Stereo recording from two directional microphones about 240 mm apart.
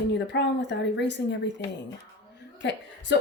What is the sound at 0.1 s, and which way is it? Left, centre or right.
Speech, left.